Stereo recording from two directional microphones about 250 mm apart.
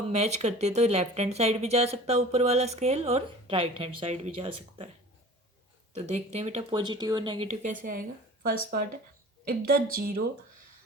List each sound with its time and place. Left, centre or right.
0.1 s speech: right
5.9 s a woman's voice: right